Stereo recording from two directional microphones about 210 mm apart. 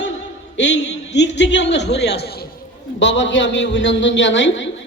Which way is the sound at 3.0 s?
60° left (ahead or behind).